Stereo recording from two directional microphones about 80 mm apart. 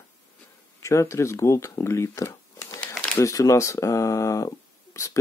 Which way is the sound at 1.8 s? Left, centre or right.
Left.